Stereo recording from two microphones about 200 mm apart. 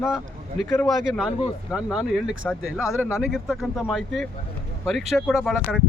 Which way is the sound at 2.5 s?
10° left (ahead or behind).